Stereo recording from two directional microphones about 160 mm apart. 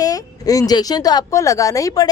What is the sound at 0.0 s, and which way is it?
A woman's voice, 20° left (ahead or behind).